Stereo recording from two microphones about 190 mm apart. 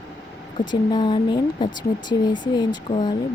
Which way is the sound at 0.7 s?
25° left (ahead or behind).